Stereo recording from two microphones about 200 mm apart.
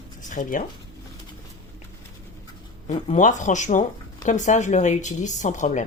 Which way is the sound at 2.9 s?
35° left (ahead or behind).